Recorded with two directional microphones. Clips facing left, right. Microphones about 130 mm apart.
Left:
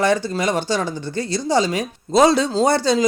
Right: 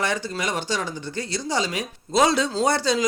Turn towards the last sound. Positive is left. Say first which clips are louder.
# left 5 dB
turn(degrees=30)  # may be behind; listen again after turning